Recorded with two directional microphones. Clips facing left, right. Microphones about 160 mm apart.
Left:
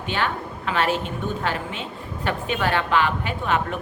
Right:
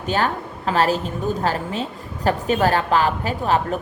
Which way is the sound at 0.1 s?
40° right (ahead or behind).